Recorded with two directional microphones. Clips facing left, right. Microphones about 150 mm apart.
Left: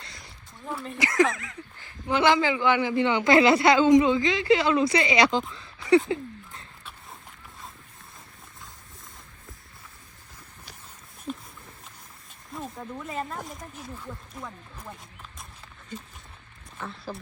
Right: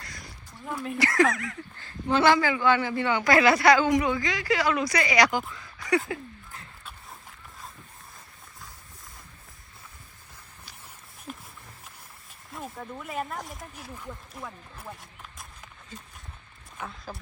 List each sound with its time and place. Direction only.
0.0 s a sound: 25° left (ahead or behind)
0.6 s a sound: 5° right (ahead or behind)
0.9 s speech: 20° left (ahead or behind)
6.8 s boat: centre (ahead or behind)
12.5 s speech: centre (ahead or behind)
16.7 s speech: 5° right (ahead or behind)